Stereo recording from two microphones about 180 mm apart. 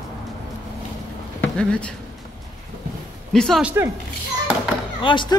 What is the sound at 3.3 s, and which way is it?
Speech, 5° left (ahead or behind).